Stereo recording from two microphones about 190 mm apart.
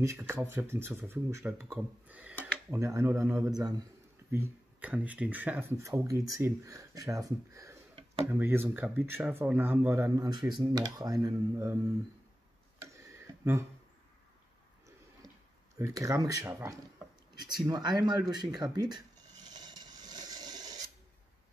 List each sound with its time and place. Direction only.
0.0 s speech: 15° right (ahead or behind)
12.8 s a sound: 15° right (ahead or behind)
15.8 s speech: 15° right (ahead or behind)
19.4 s rub: 20° right (ahead or behind)